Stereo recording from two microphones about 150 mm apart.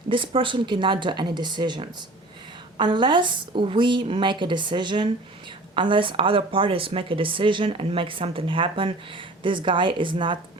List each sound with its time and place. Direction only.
0.1 s speech: 35° right (ahead or behind)